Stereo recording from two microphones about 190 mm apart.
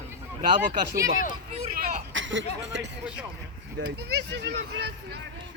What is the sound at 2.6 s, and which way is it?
Speech, 70° right (ahead or behind).